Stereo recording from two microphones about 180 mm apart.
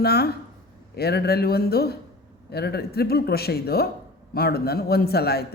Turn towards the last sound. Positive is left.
turn(degrees=60)  # may be behind; listen again after turning